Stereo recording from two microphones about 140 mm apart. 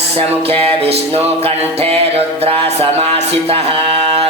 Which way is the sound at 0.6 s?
45° right (ahead or behind).